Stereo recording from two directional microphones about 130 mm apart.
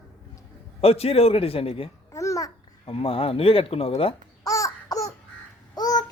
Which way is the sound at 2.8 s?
45° left (ahead or behind).